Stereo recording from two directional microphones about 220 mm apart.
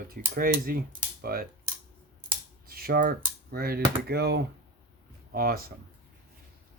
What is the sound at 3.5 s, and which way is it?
Speech, 45° right (ahead or behind).